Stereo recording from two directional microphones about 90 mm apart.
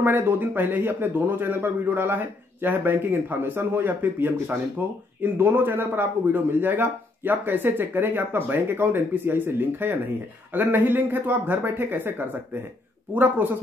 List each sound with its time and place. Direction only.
0.0 s speech: 25° right (ahead or behind)